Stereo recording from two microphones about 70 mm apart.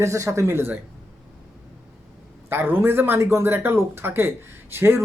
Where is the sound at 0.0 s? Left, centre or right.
Right.